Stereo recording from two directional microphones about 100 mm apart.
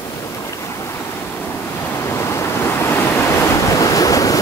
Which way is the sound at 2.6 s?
25° left (ahead or behind).